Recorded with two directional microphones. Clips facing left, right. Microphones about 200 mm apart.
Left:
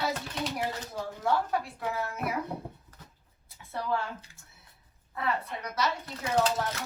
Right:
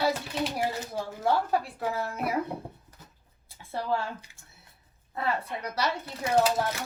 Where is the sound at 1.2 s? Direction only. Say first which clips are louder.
Right 2 dB; 35° right (ahead or behind).